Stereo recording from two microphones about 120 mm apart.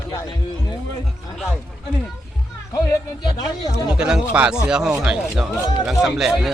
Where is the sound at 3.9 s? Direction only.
5° right (ahead or behind).